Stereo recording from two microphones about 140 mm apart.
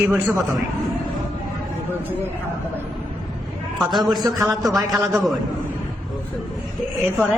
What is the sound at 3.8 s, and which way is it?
Speech, centre (ahead or behind).